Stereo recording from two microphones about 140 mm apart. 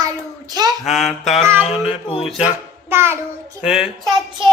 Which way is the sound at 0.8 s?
Centre (ahead or behind).